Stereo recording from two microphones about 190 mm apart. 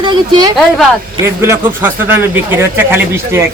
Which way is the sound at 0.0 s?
25° right (ahead or behind).